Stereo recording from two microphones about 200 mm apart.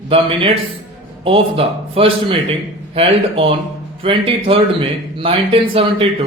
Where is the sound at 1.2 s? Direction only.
30° right (ahead or behind).